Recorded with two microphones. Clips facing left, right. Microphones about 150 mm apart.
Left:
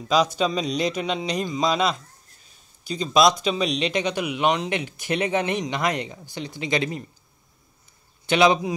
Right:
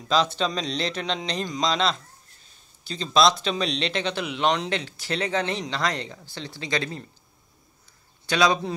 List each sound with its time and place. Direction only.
0.4 s speech: 10° left (ahead or behind)
8.3 s speech: 20° left (ahead or behind)